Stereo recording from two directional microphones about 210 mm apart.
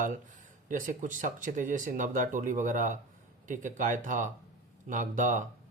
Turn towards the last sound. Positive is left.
turn(degrees=-35)  # may be behind; listen again after turning